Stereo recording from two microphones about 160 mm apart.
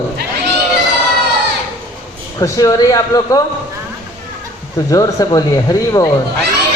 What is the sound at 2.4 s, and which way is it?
Speech, 20° left (ahead or behind).